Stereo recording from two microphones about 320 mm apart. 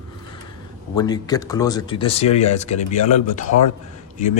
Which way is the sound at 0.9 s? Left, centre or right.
Centre.